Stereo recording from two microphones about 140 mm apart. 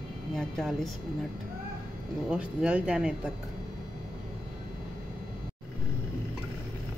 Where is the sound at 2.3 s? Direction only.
10° right (ahead or behind).